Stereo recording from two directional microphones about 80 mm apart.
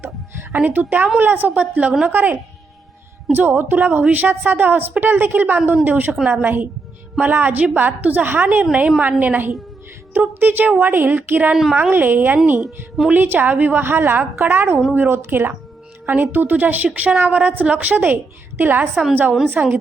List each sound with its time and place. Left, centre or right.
0.0 s music: right
1.2 s a woman's voice: right
11.5 s a woman's voice: centre